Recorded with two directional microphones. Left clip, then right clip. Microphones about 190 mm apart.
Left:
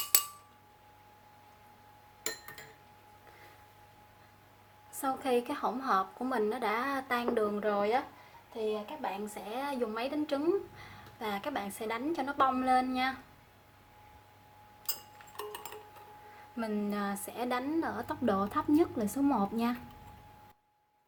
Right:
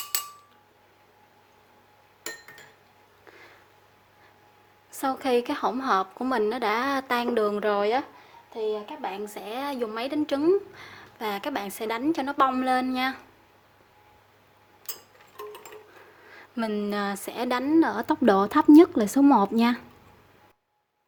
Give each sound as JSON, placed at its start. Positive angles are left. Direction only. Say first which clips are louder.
{"t": 4.9, "sound": "a woman's voice", "louder": "right 6 dB", "side_deg": -40}
{"t": 16.6, "sound": "a woman's voice", "louder": "right 7 dB", "side_deg": -40}